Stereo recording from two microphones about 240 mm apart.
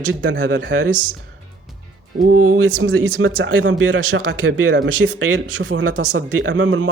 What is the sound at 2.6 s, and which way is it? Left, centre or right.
A man's voice, right.